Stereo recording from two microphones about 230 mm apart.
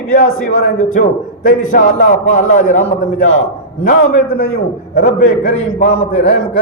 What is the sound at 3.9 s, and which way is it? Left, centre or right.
A man's voice, left.